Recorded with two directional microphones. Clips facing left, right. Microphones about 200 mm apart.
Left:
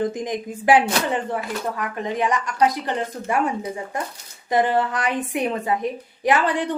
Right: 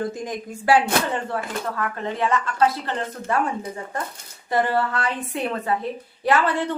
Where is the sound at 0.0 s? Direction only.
20° left (ahead or behind).